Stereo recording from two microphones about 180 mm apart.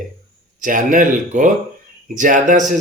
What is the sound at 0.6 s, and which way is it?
Speech, 50° right (ahead or behind).